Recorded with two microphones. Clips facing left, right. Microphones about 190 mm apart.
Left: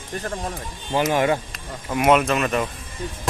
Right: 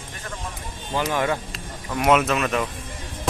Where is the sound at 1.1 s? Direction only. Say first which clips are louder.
Left 4 dB; 15° left (ahead or behind).